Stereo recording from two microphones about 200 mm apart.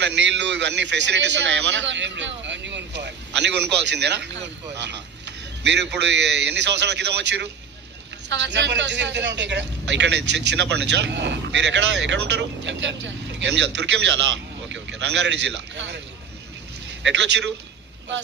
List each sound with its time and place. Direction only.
0.0 s a man's voice: 60° right (ahead or behind)
17.0 s a man's voice: 65° right (ahead or behind)